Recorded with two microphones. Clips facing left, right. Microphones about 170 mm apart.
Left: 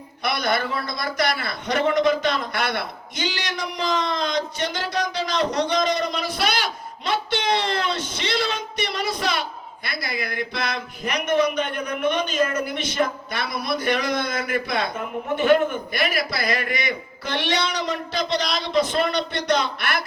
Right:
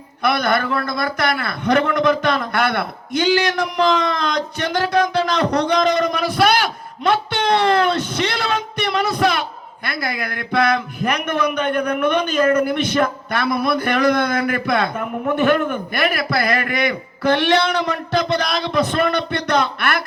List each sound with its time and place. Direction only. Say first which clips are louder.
0.2 s a man's voice: right 5 dB; 55° right (ahead or behind)